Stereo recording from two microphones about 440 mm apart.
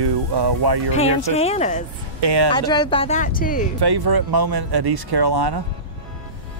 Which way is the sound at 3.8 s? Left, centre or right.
Right.